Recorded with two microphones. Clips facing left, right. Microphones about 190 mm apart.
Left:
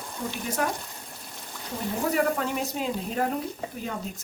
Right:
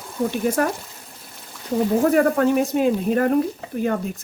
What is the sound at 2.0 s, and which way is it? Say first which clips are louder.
Speech: right 6 dB; 55° right (ahead or behind).